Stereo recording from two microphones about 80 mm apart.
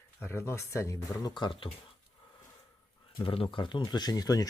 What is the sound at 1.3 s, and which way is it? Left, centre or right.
Speech, left.